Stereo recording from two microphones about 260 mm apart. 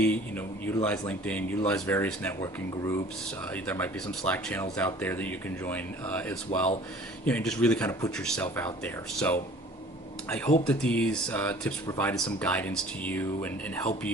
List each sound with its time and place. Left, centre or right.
0.0 s speech: centre